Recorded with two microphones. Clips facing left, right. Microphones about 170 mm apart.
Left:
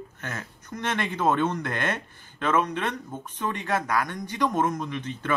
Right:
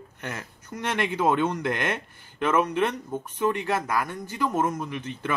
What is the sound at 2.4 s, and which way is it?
Speech, 10° right (ahead or behind).